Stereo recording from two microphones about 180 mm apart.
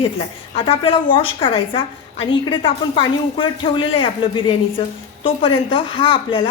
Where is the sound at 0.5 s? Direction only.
30° left (ahead or behind).